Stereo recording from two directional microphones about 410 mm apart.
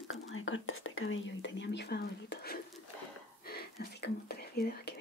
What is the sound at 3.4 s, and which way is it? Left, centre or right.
Whispering, left.